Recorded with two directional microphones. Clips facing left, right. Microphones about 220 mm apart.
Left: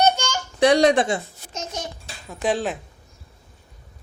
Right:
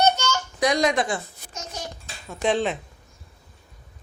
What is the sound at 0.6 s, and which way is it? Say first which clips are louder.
Speech: left 6 dB; 30° left (ahead or behind).